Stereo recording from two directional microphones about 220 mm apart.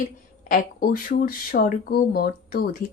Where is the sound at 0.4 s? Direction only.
40° left (ahead or behind).